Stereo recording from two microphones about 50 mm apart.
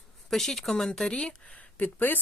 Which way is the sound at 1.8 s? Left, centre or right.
Left.